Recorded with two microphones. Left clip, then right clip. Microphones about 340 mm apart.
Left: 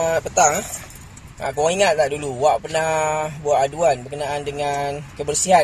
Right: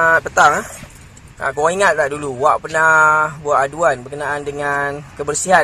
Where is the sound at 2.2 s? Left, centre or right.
Centre.